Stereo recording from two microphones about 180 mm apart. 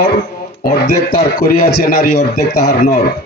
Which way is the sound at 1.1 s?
60° left (ahead or behind).